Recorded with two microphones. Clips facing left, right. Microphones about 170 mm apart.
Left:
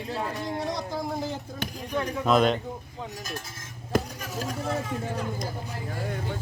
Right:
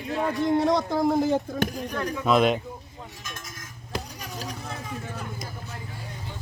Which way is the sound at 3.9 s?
50° left (ahead or behind).